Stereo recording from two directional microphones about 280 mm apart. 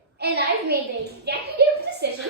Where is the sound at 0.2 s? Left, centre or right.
Right.